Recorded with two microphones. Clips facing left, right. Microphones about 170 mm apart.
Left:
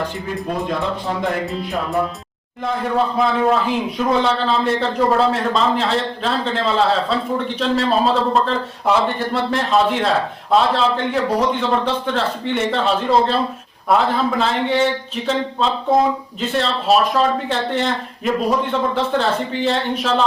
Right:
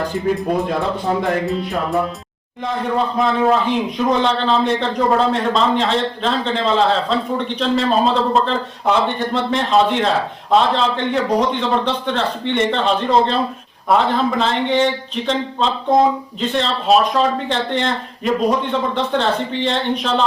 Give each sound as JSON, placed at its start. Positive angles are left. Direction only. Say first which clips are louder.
{"t": 1.5, "sound": "a man's voice", "louder": "right 3 dB", "side_deg": 0}
{"t": 3.2, "sound": "a man's voice", "louder": "right 2 dB", "side_deg": 0}